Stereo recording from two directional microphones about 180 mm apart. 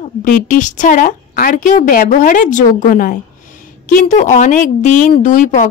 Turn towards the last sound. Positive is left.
turn(degrees=45)  # may be behind; listen again after turning